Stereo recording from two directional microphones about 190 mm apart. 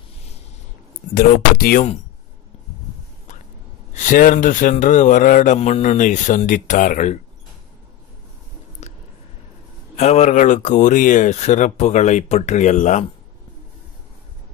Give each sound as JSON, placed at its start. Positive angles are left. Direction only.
{"t": 1.1, "sound": "speech", "side_deg": 50}
{"t": 3.9, "sound": "a man's voice", "side_deg": 40}
{"t": 9.9, "sound": "a man's voice", "side_deg": 35}